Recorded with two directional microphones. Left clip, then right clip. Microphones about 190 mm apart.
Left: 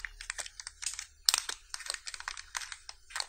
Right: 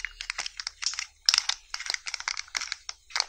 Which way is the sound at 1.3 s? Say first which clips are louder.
Right 8 dB; 15° right (ahead or behind).